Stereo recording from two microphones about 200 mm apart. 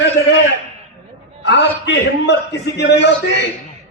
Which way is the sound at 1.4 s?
60° left (ahead or behind).